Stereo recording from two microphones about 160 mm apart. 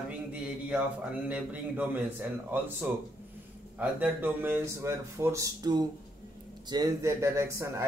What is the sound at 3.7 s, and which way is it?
A man's voice, 10° right (ahead or behind).